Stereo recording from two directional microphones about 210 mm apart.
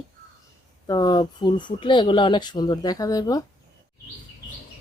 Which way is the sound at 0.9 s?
20° left (ahead or behind).